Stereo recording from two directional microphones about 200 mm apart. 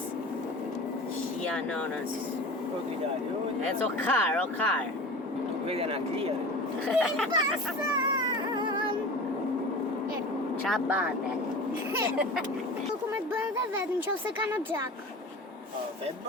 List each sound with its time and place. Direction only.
4.0 s speech: 5° left (ahead or behind)
5.6 s speech: 30° right (ahead or behind)
6.8 s speech: centre (ahead or behind)
8.5 s music: 20° right (ahead or behind)
10.7 s speech: centre (ahead or behind)